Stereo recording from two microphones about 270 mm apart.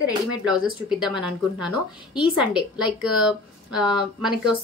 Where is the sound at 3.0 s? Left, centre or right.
Centre.